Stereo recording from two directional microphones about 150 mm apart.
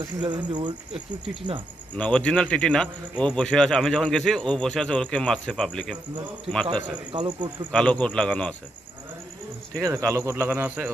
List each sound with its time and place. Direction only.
0.0 s speech: 30° right (ahead or behind)
0.9 s speech: 5° right (ahead or behind)
2.0 s speech: 5° left (ahead or behind)
7.1 s speech: 30° right (ahead or behind)
7.7 s a man's voice: 5° left (ahead or behind)
9.8 s speech: 20° right (ahead or behind)